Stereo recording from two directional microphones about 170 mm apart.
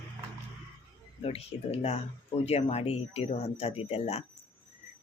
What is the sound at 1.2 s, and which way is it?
A man's voice, 35° left (ahead or behind).